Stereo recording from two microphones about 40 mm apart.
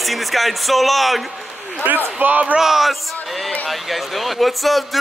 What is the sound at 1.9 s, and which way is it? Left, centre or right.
Speech, right.